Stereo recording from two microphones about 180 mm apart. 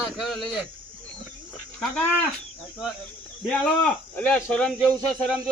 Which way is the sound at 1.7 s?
5° left (ahead or behind).